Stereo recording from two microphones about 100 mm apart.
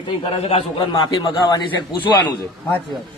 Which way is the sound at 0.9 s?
45° left (ahead or behind).